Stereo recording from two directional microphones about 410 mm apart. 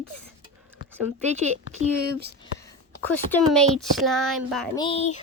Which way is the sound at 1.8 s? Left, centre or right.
Right.